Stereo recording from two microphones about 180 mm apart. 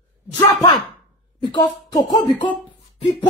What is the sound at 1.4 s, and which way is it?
Speech, 25° left (ahead or behind).